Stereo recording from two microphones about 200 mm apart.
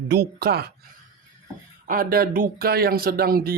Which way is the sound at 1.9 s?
45° right (ahead or behind).